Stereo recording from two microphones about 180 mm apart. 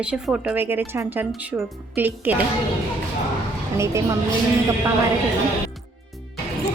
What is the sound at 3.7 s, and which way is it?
Speech, 15° right (ahead or behind).